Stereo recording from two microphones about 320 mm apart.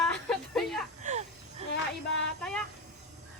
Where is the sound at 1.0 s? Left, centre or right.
Right.